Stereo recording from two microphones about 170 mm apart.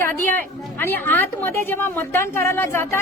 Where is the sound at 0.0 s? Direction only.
10° left (ahead or behind).